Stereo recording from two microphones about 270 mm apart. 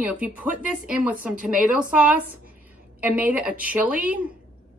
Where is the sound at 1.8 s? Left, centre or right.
Centre.